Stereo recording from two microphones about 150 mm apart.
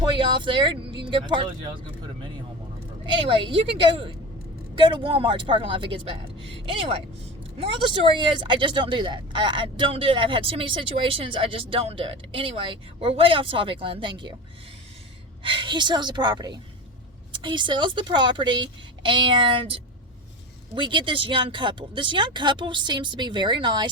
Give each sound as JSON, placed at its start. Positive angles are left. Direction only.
{"t": 0.0, "sound": "speech", "side_deg": -30}
{"t": 3.1, "sound": "speech", "side_deg": -35}
{"t": 15.4, "sound": "a woman's voice", "side_deg": -35}